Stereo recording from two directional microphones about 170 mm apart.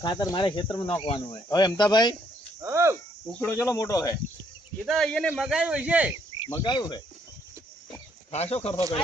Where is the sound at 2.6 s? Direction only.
15° right (ahead or behind).